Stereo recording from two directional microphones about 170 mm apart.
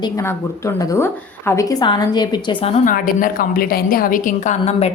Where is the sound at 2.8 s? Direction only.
55° left (ahead or behind).